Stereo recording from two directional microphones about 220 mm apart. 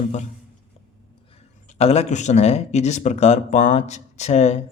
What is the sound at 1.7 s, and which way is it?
Speech, 30° left (ahead or behind).